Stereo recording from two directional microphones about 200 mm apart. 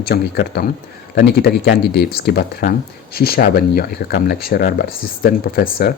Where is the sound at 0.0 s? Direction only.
50° left (ahead or behind).